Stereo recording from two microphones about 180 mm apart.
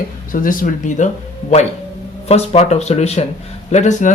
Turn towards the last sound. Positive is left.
turn(degrees=40)  # may be behind; listen again after turning